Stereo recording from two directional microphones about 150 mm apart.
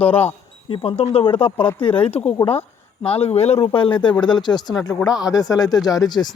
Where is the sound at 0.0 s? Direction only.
10° left (ahead or behind).